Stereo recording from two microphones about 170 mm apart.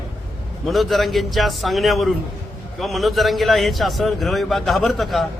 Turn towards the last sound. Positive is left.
turn(degrees=0)  # may be behind; listen again after turning